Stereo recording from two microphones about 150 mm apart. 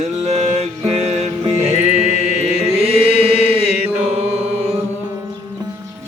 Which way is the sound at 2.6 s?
40° right (ahead or behind).